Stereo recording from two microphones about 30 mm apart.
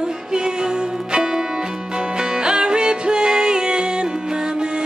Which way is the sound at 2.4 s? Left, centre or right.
Right.